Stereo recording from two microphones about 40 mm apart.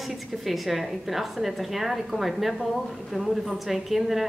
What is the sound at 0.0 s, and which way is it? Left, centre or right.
A woman's voice, centre.